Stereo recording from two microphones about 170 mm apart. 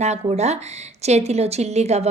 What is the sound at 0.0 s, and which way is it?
A woman's voice, 40° right (ahead or behind).